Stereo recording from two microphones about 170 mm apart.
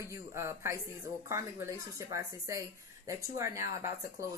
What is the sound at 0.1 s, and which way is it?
Speech, 15° right (ahead or behind).